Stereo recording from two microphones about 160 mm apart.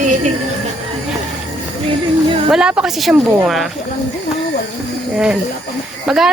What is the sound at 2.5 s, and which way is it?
Speech, 5° right (ahead or behind).